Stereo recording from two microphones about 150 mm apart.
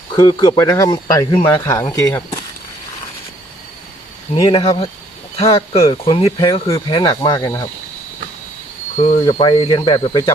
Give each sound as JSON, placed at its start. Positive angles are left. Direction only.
{"t": 0.1, "sound": "speech", "side_deg": 30}
{"t": 4.4, "sound": "speech", "side_deg": 30}
{"t": 5.4, "sound": "speech", "side_deg": 40}
{"t": 9.0, "sound": "speech", "side_deg": 50}
{"t": 9.2, "sound": "speech", "side_deg": 30}